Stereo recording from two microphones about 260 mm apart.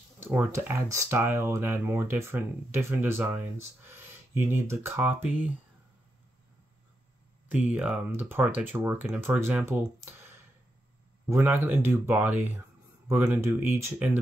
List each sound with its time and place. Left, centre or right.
0.2 s speech: centre
7.4 s speech: centre
11.2 s speech: centre